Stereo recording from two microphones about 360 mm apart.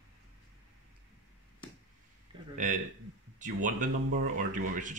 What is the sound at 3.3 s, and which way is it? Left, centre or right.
Speech, right.